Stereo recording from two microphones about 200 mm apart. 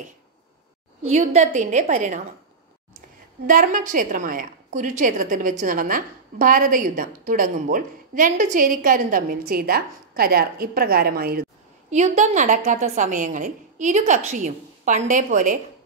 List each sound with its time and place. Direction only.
1.0 s a woman's voice: 35° right (ahead or behind)
3.4 s a woman's voice: 40° right (ahead or behind)
11.9 s a woman's voice: 35° right (ahead or behind)